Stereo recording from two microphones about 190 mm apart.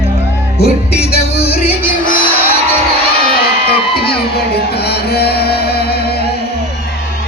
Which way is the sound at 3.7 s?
55° left (ahead or behind).